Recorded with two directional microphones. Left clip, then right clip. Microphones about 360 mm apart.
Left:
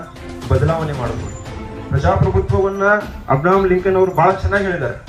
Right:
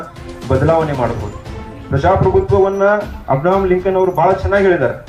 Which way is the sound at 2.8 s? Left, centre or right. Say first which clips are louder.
Right 2 dB; right.